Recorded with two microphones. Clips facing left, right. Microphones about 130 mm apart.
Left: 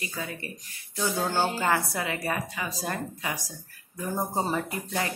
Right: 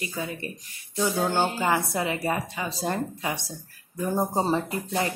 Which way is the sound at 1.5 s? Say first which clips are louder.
Right 2 dB; 15° right (ahead or behind).